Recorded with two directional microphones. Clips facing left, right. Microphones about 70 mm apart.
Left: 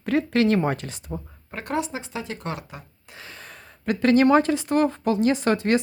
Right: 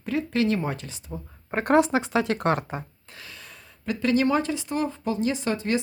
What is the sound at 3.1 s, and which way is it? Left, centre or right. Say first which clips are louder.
Gasp: left 2 dB; left.